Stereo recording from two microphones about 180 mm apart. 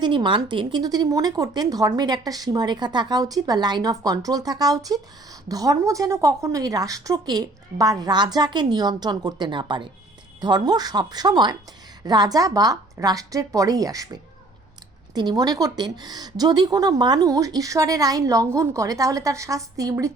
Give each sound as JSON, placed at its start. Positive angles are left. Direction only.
{"t": 0.0, "sound": "speech", "side_deg": -25}